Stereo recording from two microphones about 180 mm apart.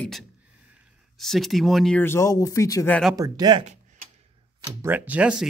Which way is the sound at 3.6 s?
40° right (ahead or behind).